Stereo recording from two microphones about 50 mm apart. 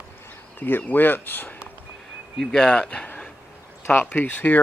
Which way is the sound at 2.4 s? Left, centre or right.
Centre.